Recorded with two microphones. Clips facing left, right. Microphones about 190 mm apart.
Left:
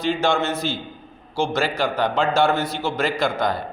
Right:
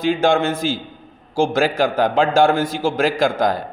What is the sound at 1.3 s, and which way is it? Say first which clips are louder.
A man's voice: right 5 dB; 50° right (ahead or behind).